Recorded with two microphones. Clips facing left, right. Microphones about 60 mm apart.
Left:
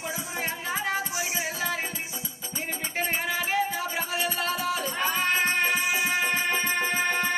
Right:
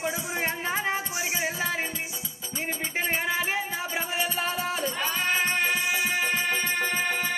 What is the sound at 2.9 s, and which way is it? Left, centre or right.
Music, centre.